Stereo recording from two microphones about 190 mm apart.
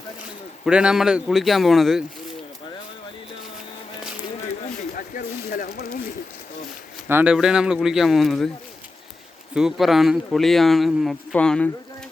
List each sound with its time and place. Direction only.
0.6 s speech: 5° right (ahead or behind)
4.8 s a sound: 45° left (ahead or behind)
7.1 s speech: 10° right (ahead or behind)
9.6 s speech: centre (ahead or behind)